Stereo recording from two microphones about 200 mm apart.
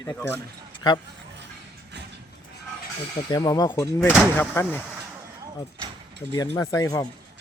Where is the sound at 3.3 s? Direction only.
20° left (ahead or behind).